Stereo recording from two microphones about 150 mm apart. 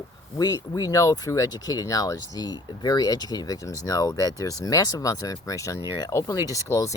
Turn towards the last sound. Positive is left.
turn(degrees=20)  # may be behind; listen again after turning